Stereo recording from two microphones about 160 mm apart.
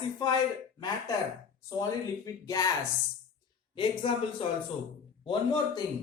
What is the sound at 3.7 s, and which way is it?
Speech, 35° left (ahead or behind).